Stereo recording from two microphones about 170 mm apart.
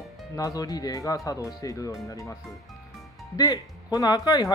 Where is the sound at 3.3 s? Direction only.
25° left (ahead or behind).